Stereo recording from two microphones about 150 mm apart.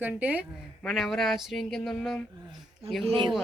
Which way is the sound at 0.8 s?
Centre (ahead or behind).